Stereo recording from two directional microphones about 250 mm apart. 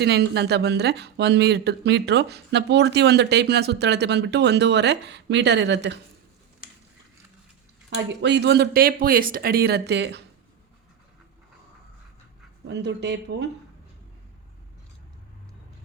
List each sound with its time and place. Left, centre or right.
0.0 s speech: right
7.9 s speech: right
12.6 s speech: right